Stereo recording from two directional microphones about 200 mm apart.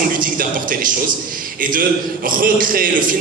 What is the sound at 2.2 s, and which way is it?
Speech, 45° right (ahead or behind).